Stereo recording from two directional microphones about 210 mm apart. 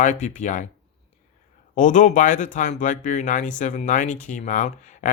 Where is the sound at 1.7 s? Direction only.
35° left (ahead or behind).